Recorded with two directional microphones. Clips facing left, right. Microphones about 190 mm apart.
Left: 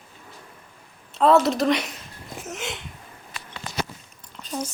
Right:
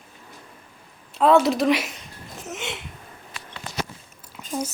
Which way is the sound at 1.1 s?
Centre (ahead or behind).